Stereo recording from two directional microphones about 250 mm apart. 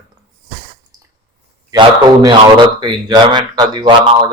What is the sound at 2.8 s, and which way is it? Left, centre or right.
A man's voice, centre.